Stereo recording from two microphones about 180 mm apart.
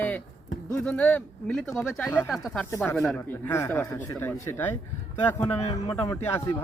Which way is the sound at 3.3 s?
15° left (ahead or behind).